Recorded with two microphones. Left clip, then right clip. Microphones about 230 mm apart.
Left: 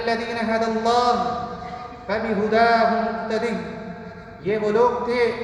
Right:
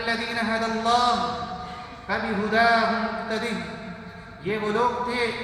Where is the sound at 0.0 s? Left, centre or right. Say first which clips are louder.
Left 2 dB; centre.